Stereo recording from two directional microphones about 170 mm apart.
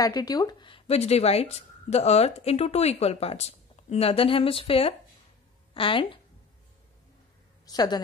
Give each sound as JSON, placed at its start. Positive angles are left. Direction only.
{"t": 0.0, "sound": "speech", "side_deg": 20}
{"t": 7.6, "sound": "a woman's voice", "side_deg": 25}